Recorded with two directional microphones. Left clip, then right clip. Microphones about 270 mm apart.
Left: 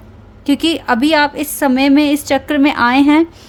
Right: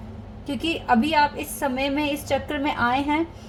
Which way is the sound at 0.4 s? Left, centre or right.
Left.